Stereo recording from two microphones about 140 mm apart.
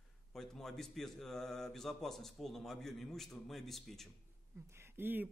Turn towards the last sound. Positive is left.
turn(degrees=-15)  # may be behind; listen again after turning